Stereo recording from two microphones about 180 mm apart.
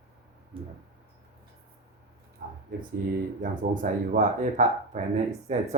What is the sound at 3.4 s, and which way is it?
Speech, 45° right (ahead or behind).